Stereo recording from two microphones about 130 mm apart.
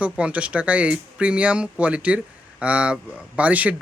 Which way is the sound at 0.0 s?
10° right (ahead or behind).